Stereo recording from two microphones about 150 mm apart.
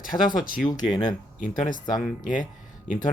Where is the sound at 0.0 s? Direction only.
65° left (ahead or behind).